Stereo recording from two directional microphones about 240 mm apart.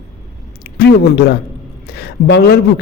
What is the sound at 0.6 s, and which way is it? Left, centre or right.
A man's voice, left.